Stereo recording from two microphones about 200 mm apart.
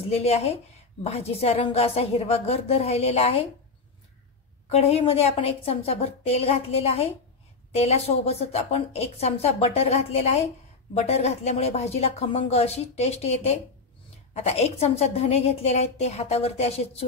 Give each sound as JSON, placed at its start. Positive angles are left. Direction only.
{"t": 0.1, "sound": "a woman's voice", "side_deg": 30}
{"t": 4.6, "sound": "a woman's voice", "side_deg": 30}